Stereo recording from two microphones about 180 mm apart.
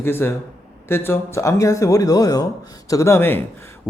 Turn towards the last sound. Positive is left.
turn(degrees=15)  # may be behind; listen again after turning